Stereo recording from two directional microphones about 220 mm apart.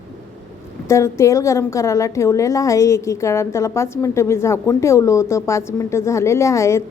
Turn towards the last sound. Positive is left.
turn(degrees=15)  # may be behind; listen again after turning